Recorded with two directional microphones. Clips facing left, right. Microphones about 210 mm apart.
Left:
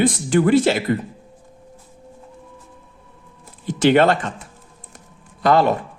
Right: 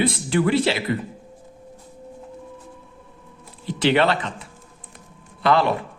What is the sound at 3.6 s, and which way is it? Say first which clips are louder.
Speech: left 4 dB; 45° left (ahead or behind).